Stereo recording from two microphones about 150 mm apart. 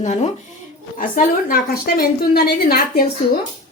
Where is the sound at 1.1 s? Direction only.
70° left (ahead or behind).